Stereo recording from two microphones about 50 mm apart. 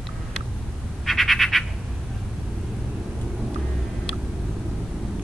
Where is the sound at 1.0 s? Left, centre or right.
Centre.